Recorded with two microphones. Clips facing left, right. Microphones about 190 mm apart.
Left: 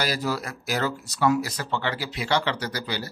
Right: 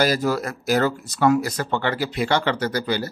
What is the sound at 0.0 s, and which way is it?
Speech, 50° right (ahead or behind).